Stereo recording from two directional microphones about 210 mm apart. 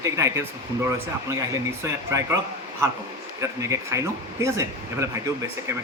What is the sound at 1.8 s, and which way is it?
Speech, 15° right (ahead or behind).